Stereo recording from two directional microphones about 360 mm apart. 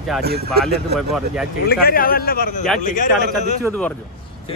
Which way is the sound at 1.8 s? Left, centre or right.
Left.